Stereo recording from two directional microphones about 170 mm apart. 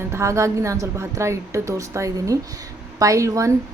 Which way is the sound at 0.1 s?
15° right (ahead or behind).